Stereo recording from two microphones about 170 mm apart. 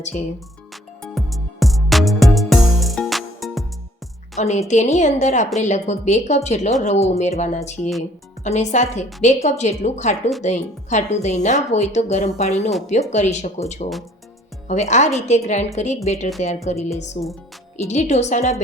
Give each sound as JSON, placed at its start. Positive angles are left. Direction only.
{"t": 1.0, "sound": "music", "side_deg": 0}
{"t": 4.4, "sound": "a woman's voice", "side_deg": 40}